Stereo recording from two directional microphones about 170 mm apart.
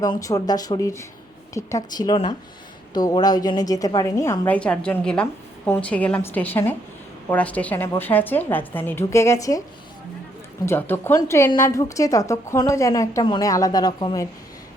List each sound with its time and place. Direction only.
0.0 s a woman's voice: 20° left (ahead or behind)
10.7 s a woman's voice: 10° left (ahead or behind)